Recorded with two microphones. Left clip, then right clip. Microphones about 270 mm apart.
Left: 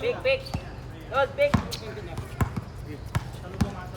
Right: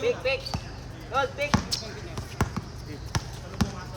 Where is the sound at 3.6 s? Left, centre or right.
Centre.